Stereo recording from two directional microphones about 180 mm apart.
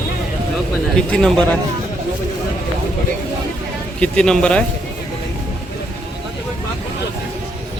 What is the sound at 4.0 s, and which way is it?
Speech, 5° left (ahead or behind).